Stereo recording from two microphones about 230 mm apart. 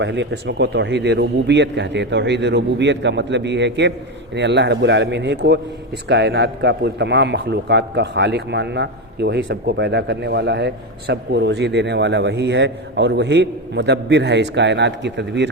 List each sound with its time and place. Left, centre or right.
0.0 s a man's voice: right